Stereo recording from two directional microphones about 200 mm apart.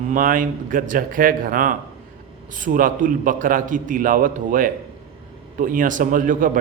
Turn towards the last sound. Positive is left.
turn(degrees=-40)  # may be behind; listen again after turning